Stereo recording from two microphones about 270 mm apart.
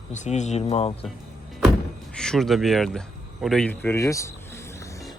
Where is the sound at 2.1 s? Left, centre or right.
Centre.